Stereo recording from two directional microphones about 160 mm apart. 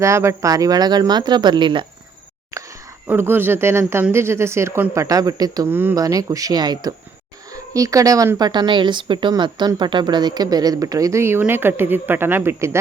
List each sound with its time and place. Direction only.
0.0 s a woman's voice: 15° right (ahead or behind)
2.5 s a sound: 20° right (ahead or behind)
3.1 s a woman's voice: 15° right (ahead or behind)